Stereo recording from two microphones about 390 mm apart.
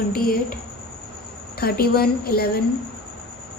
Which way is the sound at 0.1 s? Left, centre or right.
Left.